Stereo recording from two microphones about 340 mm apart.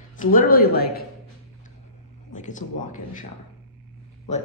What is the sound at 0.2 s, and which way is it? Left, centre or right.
Speech, left.